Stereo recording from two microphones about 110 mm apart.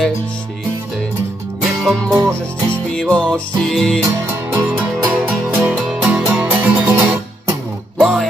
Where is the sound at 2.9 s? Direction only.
10° left (ahead or behind).